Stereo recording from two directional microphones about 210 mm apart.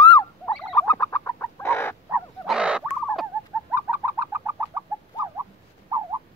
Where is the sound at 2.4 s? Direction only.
5° right (ahead or behind).